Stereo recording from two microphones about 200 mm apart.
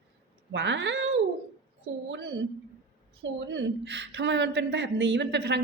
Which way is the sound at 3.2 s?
60° right (ahead or behind).